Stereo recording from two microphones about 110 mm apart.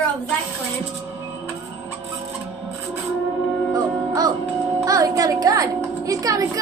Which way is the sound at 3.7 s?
35° right (ahead or behind).